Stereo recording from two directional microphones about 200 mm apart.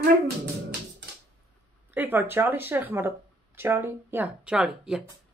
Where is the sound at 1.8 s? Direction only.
10° right (ahead or behind).